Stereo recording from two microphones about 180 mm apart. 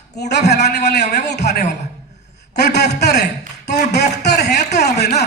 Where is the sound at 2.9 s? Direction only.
70° left (ahead or behind).